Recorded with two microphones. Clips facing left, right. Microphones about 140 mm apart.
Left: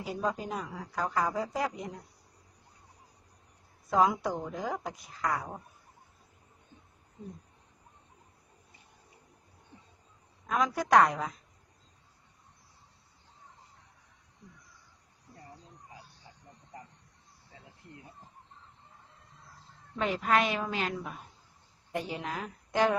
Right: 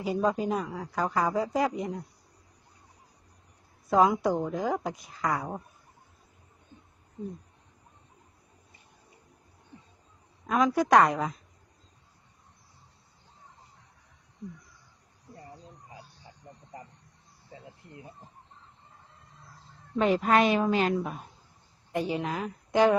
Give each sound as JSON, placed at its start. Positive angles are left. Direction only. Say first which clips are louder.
{"t": 0.0, "sound": "a woman's voice", "louder": "right 6 dB", "side_deg": -10}
{"t": 3.8, "sound": "a woman's voice", "louder": "right 4 dB", "side_deg": -5}
{"t": 4.3, "sound": "a woman's voice", "louder": "right 7 dB", "side_deg": -15}
{"t": 4.5, "sound": "a woman's voice", "louder": "right 6 dB", "side_deg": -5}
{"t": 10.4, "sound": "a woman's voice", "louder": "right 5 dB", "side_deg": 0}
{"t": 20.0, "sound": "a woman's voice", "louder": "right 5 dB", "side_deg": -35}
{"t": 21.9, "sound": "a woman's voice", "louder": "right 5 dB", "side_deg": -5}